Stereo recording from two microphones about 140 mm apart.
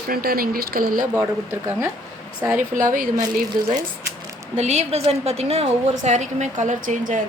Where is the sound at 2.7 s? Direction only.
70° right (ahead or behind).